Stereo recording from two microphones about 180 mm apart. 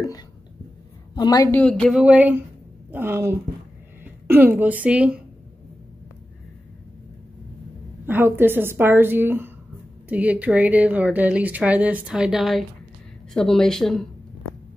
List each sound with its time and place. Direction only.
1.1 s a woman's voice: 20° left (ahead or behind)
1.6 s a woman's voice: 5° left (ahead or behind)
8.1 s speech: 10° right (ahead or behind)